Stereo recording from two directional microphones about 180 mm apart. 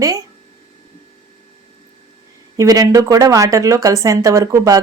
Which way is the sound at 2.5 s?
20° right (ahead or behind).